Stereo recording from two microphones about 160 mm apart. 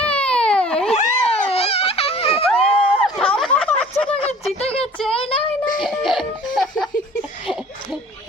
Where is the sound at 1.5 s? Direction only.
40° left (ahead or behind).